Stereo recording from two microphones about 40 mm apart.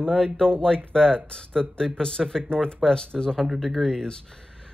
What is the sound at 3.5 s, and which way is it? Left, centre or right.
Speech, centre.